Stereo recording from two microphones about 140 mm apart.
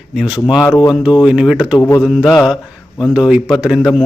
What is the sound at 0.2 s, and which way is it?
A man's voice, 5° right (ahead or behind).